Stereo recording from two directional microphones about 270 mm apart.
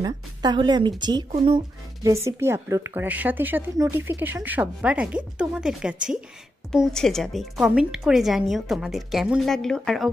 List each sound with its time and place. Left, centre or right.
0.0 s a woman's voice: centre